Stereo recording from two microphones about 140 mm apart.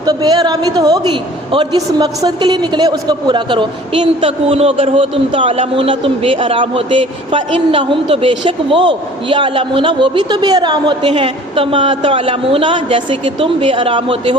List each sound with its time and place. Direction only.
0.0 s a woman's voice: 30° right (ahead or behind)